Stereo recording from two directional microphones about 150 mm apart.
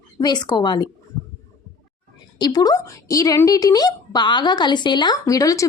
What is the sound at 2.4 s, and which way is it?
A woman's voice, 25° left (ahead or behind).